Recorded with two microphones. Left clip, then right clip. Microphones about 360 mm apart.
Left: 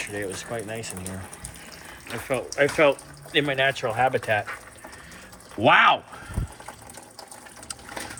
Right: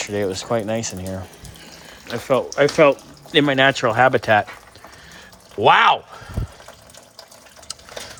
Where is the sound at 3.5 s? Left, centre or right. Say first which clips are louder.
Right 7 dB; right.